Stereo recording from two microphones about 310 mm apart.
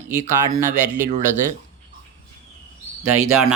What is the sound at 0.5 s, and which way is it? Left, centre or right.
Speech, centre.